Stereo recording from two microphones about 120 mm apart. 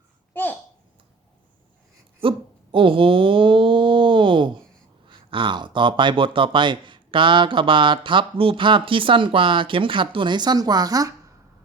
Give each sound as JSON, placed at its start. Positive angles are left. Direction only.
{"t": 2.2, "sound": "speech", "side_deg": -50}
{"t": 2.7, "sound": "a sound", "side_deg": -45}
{"t": 5.0, "sound": "speech", "side_deg": -45}